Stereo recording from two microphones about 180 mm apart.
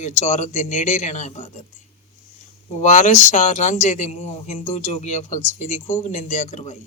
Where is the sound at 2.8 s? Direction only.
40° left (ahead or behind).